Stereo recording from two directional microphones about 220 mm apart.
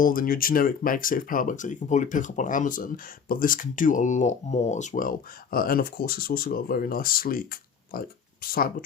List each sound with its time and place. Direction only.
0.0 s speech: 40° left (ahead or behind)